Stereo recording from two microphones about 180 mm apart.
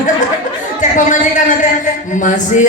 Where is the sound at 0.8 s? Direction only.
45° left (ahead or behind).